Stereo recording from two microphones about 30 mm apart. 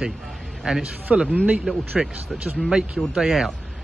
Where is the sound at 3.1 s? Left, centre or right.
Centre.